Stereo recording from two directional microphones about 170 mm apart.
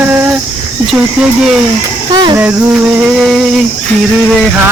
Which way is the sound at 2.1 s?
25° right (ahead or behind).